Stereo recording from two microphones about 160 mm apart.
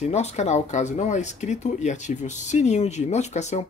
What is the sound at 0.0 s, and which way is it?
Speech, 40° left (ahead or behind).